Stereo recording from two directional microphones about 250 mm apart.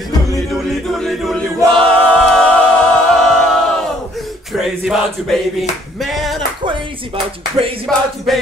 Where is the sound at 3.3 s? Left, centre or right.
Centre.